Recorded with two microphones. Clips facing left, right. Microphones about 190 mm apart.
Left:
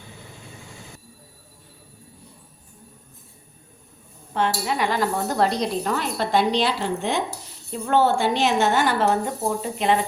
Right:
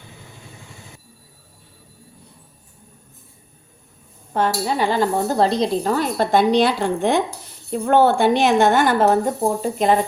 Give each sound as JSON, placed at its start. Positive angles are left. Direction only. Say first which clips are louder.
{"t": 4.4, "sound": "a woman's voice", "louder": "right 3 dB", "side_deg": -40}